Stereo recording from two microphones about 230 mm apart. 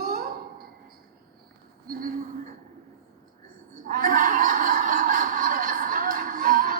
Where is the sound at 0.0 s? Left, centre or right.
Right.